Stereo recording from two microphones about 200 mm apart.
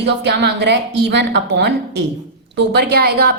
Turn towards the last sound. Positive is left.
turn(degrees=-50)  # may be behind; listen again after turning